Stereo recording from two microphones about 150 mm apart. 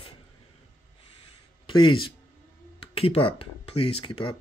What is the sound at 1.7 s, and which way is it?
Speech, 35° left (ahead or behind).